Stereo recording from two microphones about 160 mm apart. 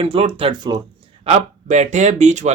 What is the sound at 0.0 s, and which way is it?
Speech, 35° right (ahead or behind).